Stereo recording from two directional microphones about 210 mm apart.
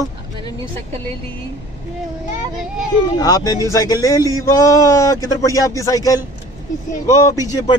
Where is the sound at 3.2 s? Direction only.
15° left (ahead or behind).